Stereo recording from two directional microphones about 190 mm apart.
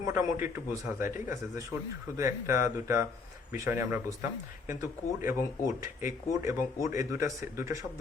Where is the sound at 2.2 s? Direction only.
15° right (ahead or behind).